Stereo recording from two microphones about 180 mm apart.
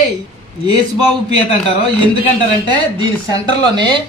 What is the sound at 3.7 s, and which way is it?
Speech, 25° right (ahead or behind).